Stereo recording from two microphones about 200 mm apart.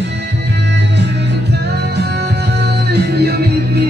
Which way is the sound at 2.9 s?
55° right (ahead or behind).